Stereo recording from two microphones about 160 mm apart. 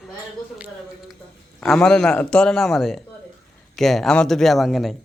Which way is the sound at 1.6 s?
Centre (ahead or behind).